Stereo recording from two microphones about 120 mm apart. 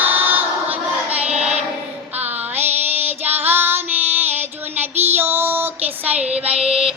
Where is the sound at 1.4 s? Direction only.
65° right (ahead or behind).